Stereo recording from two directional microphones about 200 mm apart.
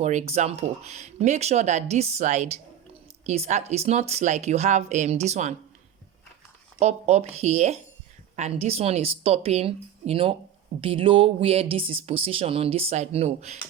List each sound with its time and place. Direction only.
0.0 s speech: 35° right (ahead or behind)
6.7 s speech: 35° right (ahead or behind)